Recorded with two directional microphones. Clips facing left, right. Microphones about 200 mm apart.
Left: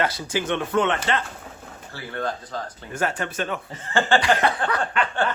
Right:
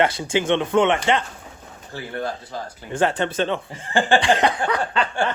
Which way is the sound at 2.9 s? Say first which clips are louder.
Right 6 dB; 30° right (ahead or behind).